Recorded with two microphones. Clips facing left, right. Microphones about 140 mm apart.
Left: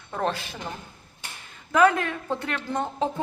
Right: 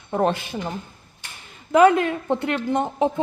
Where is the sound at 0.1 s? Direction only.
20° right (ahead or behind).